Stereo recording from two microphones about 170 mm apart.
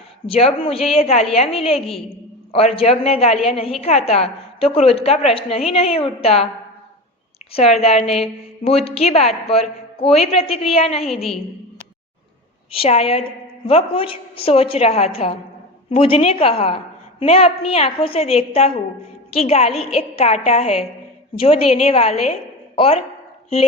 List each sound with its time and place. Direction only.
0.3 s a woman's voice: 35° left (ahead or behind)
7.5 s a woman's voice: 35° left (ahead or behind)
11.1 s a woman's voice: centre (ahead or behind)
12.7 s a woman's voice: 35° left (ahead or behind)